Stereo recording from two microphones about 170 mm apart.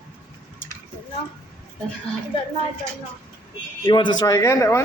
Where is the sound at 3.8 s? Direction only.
25° left (ahead or behind).